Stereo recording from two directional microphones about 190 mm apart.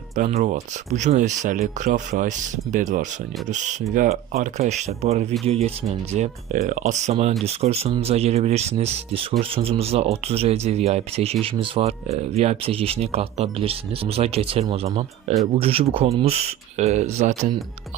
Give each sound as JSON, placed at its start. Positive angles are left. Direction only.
{"t": 0.2, "sound": "speech", "side_deg": -40}